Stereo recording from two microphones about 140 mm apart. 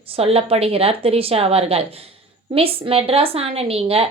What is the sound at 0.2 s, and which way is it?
A woman's voice, 45° right (ahead or behind).